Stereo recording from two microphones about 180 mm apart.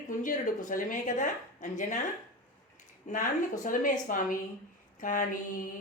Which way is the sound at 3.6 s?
45° left (ahead or behind).